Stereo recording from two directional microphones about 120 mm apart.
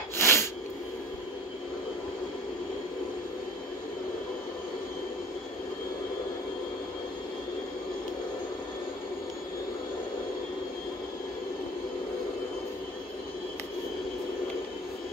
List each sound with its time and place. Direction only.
0.2 s sneeze: 20° left (ahead or behind)